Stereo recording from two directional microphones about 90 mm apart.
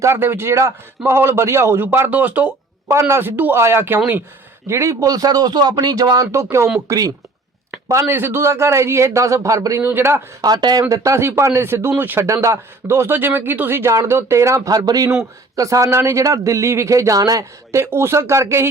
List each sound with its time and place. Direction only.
0.0 s speech: 25° right (ahead or behind)
2.9 s speech: 30° right (ahead or behind)
8.1 s a man's voice: 25° right (ahead or behind)
9.8 s speech: 25° right (ahead or behind)
10.4 s a man's voice: 50° right (ahead or behind)
15.1 s a man's voice: 35° right (ahead or behind)